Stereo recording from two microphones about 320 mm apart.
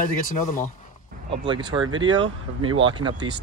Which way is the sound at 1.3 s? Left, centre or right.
Centre.